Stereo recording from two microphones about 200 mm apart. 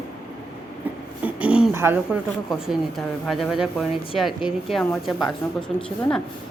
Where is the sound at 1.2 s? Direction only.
5° right (ahead or behind).